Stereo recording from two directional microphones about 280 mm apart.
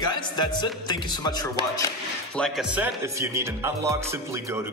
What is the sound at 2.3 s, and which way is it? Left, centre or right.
Speech, centre.